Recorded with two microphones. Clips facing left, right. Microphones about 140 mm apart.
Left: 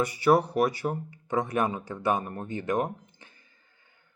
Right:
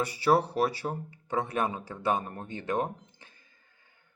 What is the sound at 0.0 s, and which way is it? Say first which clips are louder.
Speech: left 3 dB; 30° right (ahead or behind).